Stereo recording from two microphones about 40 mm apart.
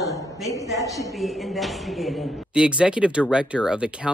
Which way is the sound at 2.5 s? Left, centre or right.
Right.